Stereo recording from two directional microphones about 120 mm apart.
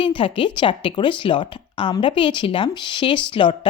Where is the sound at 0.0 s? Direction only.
45° left (ahead or behind).